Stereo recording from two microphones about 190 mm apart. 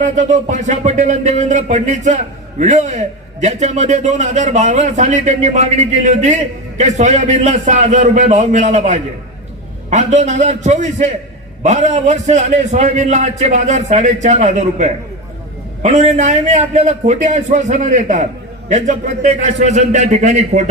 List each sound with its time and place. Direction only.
0.0 s speech: 40° right (ahead or behind)